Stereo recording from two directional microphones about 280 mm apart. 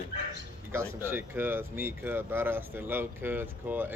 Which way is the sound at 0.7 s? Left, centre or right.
Centre.